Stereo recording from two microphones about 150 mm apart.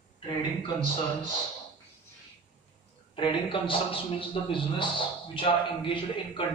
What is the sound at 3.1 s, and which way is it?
A man's voice, 35° left (ahead or behind).